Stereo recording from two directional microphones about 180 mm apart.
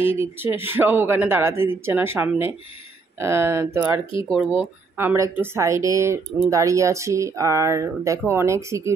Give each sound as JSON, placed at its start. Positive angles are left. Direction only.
{"t": 0.0, "sound": "speech", "side_deg": -10}
{"t": 4.0, "sound": "speech", "side_deg": 30}
{"t": 4.9, "sound": "speech", "side_deg": -15}